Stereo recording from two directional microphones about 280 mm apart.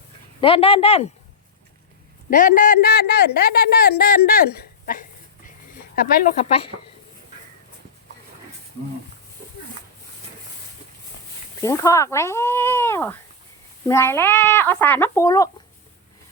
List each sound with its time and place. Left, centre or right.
0.4 s speech: centre
2.3 s a man's voice: left
6.4 s speech: left
11.6 s speech: centre